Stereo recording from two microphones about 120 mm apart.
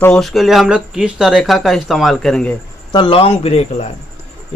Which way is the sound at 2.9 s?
45° left (ahead or behind).